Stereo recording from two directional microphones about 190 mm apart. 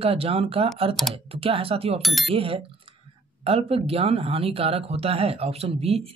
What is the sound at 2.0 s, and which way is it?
Speech, centre (ahead or behind).